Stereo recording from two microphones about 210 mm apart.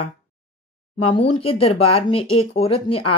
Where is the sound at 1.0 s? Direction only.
25° left (ahead or behind).